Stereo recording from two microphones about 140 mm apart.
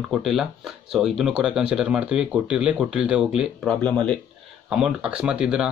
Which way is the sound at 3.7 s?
10° left (ahead or behind).